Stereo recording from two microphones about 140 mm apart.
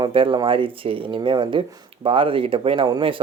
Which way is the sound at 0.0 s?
40° right (ahead or behind).